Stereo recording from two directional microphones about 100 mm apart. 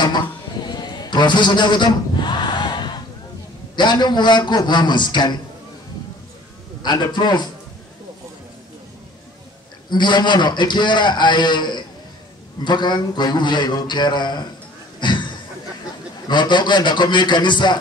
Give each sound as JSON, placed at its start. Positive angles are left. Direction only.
{"t": 0.0, "sound": "a sound", "side_deg": 45}
{"t": 3.7, "sound": "a man's voice", "side_deg": 50}
{"t": 6.8, "sound": "a man's voice", "side_deg": 50}
{"t": 9.8, "sound": "a man's voice", "side_deg": 50}
{"t": 15.0, "sound": "a sound", "side_deg": 50}
{"t": 16.3, "sound": "a man's voice", "side_deg": 50}